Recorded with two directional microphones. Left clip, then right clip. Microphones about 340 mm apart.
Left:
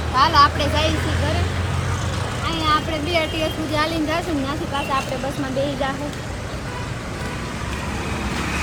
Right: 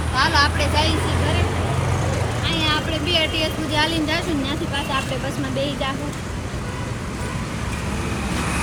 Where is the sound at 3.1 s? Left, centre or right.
Left.